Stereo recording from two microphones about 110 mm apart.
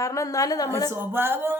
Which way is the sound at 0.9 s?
20° right (ahead or behind).